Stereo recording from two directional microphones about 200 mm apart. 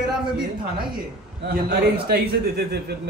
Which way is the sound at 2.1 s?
50° right (ahead or behind).